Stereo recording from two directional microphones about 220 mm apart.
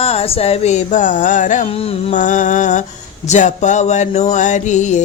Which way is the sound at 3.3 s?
35° left (ahead or behind).